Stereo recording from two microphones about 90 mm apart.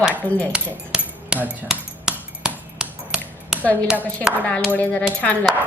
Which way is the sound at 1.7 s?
5° right (ahead or behind).